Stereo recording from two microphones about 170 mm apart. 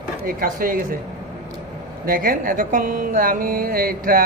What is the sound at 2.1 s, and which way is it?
Mantra, 55° right (ahead or behind).